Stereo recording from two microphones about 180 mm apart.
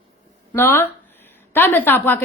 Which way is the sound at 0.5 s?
15° left (ahead or behind).